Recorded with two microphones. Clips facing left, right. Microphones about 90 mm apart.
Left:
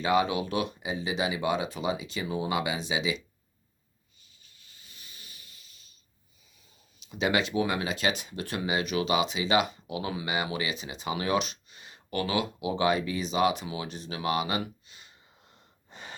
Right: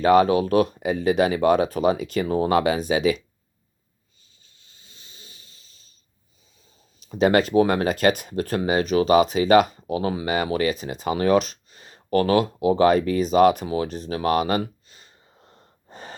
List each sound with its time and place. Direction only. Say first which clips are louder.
0.0 s speech: right 9 dB; 45° right (ahead or behind)
4.4 s rub: right 1 dB; 30° right (ahead or behind)
6.7 s speech: right 8 dB; 40° right (ahead or behind)